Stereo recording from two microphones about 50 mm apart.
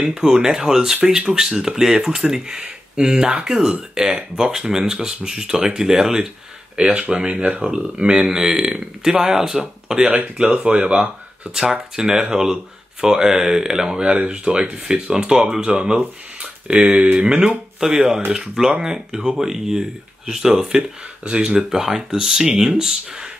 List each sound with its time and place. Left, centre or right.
0.0 s speech: centre
6.8 s speech: right
10.0 s speech: right; by 20.8 s centre
21.2 s speech: right